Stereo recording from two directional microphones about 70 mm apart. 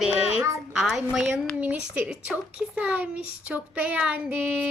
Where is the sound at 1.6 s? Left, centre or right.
Right.